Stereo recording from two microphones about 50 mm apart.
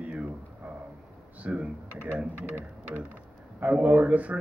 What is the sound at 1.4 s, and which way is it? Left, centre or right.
Speech, right.